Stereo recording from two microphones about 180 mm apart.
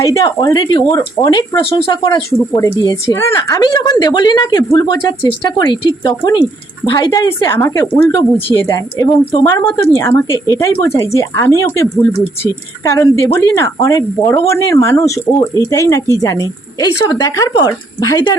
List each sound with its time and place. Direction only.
0.0 s a woman's voice: 20° left (ahead or behind)